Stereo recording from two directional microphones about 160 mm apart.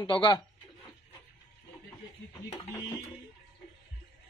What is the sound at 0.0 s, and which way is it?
Speech, 30° left (ahead or behind).